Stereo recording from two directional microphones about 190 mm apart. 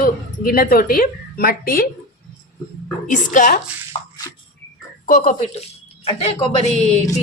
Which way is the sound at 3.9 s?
30° left (ahead or behind).